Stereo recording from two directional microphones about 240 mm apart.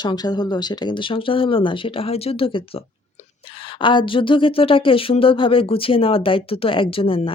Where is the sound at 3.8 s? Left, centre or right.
Centre.